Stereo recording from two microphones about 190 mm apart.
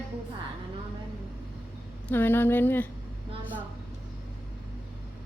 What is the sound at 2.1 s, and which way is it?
Speech, 10° left (ahead or behind).